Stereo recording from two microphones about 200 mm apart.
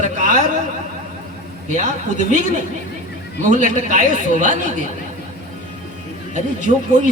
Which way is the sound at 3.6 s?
40° right (ahead or behind).